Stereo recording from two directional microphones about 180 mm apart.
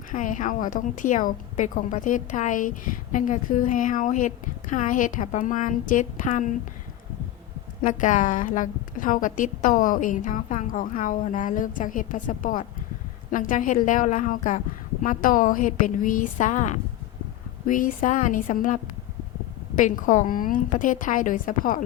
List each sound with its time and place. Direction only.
0.1 s a woman's voice: 45° left (ahead or behind)
7.8 s a woman's voice: 45° left (ahead or behind)